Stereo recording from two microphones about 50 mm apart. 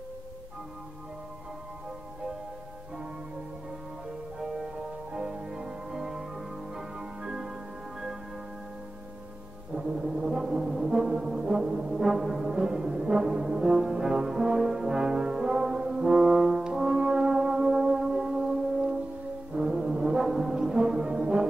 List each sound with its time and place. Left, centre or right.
5.1 s music: centre
9.8 s brass instrument: centre